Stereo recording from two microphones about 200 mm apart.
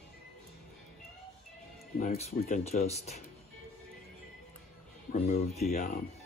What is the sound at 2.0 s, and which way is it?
Speech, 30° left (ahead or behind).